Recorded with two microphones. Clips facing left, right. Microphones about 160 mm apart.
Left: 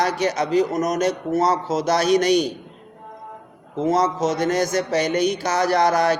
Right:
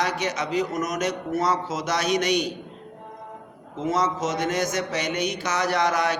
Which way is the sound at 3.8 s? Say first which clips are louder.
Left 5 dB; 35° left (ahead or behind).